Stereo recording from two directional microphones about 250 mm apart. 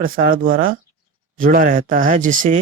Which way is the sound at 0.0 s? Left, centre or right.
Right.